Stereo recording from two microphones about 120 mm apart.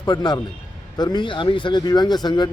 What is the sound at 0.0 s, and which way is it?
A man's voice, 35° left (ahead or behind).